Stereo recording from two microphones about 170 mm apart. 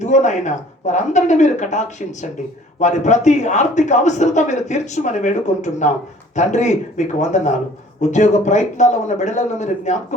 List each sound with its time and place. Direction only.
0.0 s speech: 45° left (ahead or behind)